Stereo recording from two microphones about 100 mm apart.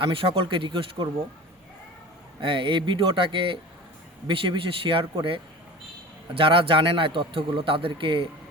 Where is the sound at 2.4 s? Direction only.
55° right (ahead or behind).